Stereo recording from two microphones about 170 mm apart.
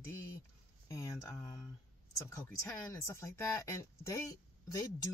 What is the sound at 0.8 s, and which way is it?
Speech, 20° left (ahead or behind).